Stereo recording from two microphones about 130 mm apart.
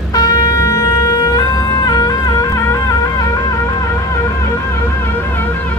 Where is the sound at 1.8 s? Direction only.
30° left (ahead or behind).